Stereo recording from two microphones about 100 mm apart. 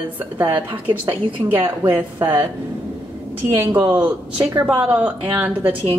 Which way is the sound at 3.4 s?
20° right (ahead or behind).